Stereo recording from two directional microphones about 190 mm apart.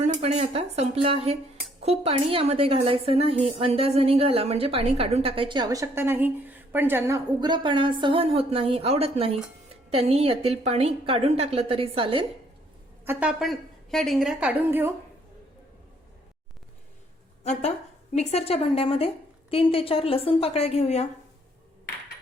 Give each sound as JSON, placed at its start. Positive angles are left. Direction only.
{"t": 0.0, "sound": "a woman's voice", "side_deg": -35}
{"t": 7.3, "sound": "a woman's voice", "side_deg": -25}
{"t": 13.1, "sound": "a woman's voice", "side_deg": -5}
{"t": 17.4, "sound": "a woman's voice", "side_deg": 35}